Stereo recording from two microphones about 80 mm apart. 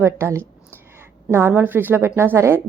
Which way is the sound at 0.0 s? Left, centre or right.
Right.